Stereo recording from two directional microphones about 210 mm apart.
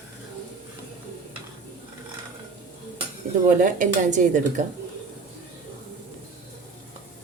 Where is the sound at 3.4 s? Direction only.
40° right (ahead or behind).